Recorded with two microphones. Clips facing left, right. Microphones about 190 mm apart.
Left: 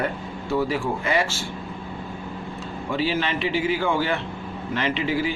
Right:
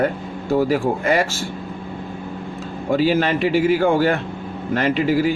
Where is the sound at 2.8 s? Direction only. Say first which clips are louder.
Right 7 dB; 45° right (ahead or behind).